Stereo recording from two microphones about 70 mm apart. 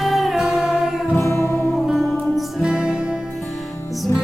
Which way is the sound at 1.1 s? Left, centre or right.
Left.